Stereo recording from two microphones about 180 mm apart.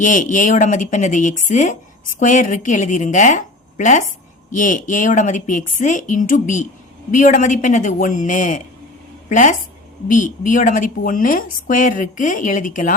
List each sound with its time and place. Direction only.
0.0 s speech: 45° left (ahead or behind)